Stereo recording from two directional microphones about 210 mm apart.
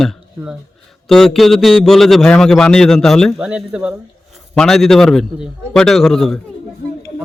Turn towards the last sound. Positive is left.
turn(degrees=0)  # may be behind; listen again after turning